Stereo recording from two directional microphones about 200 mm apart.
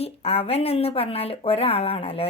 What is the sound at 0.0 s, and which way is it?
Speech, 30° left (ahead or behind).